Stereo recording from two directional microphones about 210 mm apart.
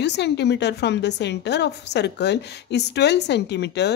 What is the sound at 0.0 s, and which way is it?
A woman's voice, 55° left (ahead or behind).